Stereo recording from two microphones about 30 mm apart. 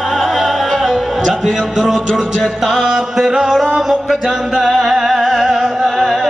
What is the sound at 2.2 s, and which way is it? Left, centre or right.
Music, centre.